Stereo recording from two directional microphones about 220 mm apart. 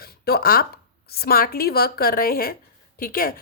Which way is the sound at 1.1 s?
45° left (ahead or behind).